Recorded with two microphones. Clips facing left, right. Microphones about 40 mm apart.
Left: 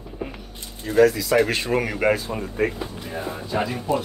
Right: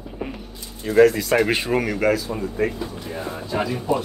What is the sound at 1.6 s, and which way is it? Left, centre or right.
Speech, centre.